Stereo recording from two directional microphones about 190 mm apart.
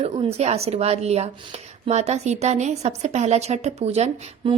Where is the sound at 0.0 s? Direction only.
35° right (ahead or behind).